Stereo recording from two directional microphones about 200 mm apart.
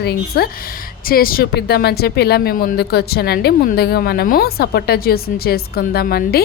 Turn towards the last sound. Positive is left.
turn(degrees=50)  # may be behind; listen again after turning